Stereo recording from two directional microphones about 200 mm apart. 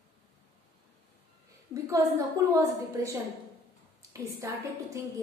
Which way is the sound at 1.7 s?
15° right (ahead or behind).